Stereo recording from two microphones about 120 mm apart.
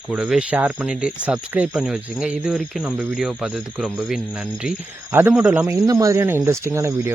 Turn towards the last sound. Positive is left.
turn(degrees=-20)  # may be behind; listen again after turning